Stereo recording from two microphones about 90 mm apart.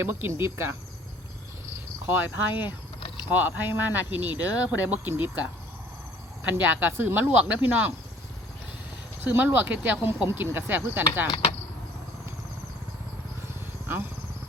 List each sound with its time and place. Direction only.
0.0 s speech: 25° right (ahead or behind)
2.0 s speech: 25° right (ahead or behind)
9.2 s speech: 20° right (ahead or behind)